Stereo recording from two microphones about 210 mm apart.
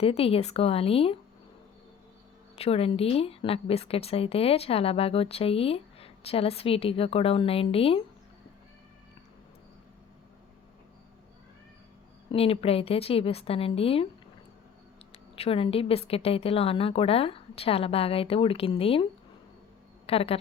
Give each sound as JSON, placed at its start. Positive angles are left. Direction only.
{"t": 0.0, "sound": "speech", "side_deg": 25}
{"t": 2.6, "sound": "speech", "side_deg": 30}
{"t": 12.3, "sound": "speech", "side_deg": 25}
{"t": 15.1, "sound": "speech", "side_deg": 25}
{"t": 20.1, "sound": "speech", "side_deg": 30}